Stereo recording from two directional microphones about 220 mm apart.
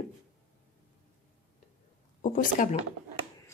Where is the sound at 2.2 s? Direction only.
35° left (ahead or behind).